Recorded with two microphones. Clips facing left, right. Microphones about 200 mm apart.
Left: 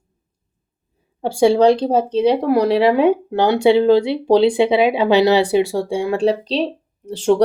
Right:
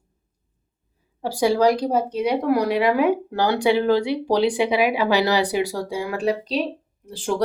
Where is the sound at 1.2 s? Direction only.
25° left (ahead or behind).